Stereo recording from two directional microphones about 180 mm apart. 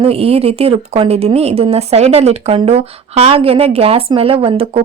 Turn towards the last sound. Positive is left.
turn(degrees=-30)  # may be behind; listen again after turning